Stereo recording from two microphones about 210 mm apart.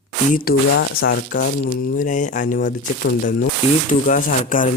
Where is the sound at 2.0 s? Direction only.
35° left (ahead or behind).